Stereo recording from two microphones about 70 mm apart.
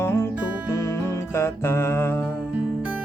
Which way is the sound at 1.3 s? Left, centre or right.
Left.